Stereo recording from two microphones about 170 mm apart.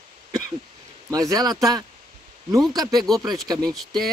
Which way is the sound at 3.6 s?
Centre (ahead or behind).